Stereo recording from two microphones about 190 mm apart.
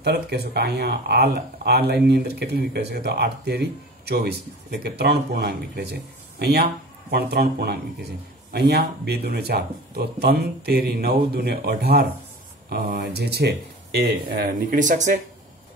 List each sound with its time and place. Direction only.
0.0 s speech: 60° right (ahead or behind); by 15.1 s 40° right (ahead or behind)